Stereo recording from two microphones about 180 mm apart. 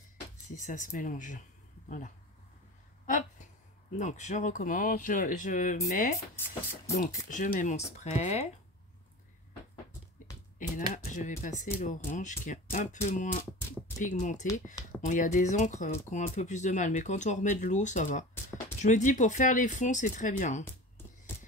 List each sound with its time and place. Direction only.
0.6 s speech: 45° left (ahead or behind)
3.1 s a sound: 45° left (ahead or behind)
4.0 s speech: 40° left (ahead or behind)
10.9 s speech: 45° left (ahead or behind)